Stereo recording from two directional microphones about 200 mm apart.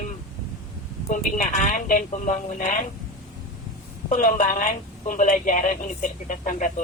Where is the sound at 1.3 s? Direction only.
40° left (ahead or behind).